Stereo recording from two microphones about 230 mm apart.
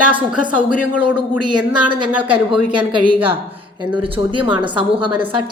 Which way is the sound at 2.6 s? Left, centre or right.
Centre.